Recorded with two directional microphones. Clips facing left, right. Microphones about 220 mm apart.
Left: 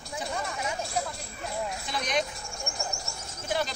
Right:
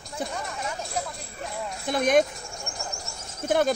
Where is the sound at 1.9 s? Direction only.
50° right (ahead or behind).